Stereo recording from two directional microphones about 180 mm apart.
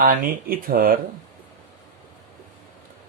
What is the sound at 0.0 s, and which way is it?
Speech, 55° right (ahead or behind).